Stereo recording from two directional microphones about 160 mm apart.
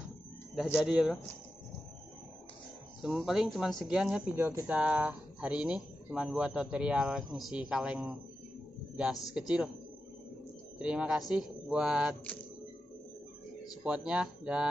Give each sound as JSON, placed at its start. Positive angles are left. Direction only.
{"t": 0.7, "sound": "speech", "side_deg": -5}
{"t": 3.0, "sound": "speech", "side_deg": -5}
{"t": 10.8, "sound": "speech", "side_deg": -5}
{"t": 13.8, "sound": "speech", "side_deg": -5}